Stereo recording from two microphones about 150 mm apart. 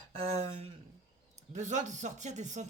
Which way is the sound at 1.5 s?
55° right (ahead or behind).